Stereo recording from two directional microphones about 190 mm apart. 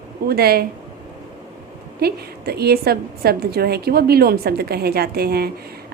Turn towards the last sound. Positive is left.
turn(degrees=-55)  # may be behind; listen again after turning